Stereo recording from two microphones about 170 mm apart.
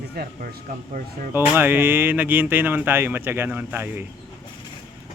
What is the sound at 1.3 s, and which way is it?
Speech, 10° right (ahead or behind).